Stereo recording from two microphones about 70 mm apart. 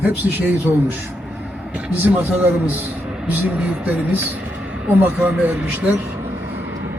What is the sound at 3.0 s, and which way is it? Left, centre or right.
Vehicle, centre.